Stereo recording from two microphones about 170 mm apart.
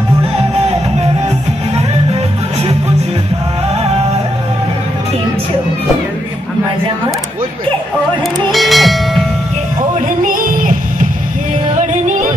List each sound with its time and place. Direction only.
8.5 s music: centre (ahead or behind)
10.2 s music: 55° right (ahead or behind)